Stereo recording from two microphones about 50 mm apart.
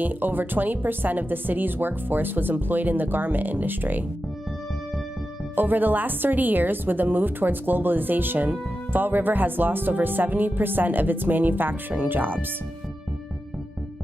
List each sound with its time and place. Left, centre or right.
0.0 s a woman's voice: right
5.6 s a woman's voice: right